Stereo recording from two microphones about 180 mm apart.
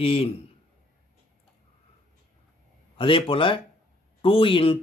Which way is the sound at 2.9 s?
30° left (ahead or behind).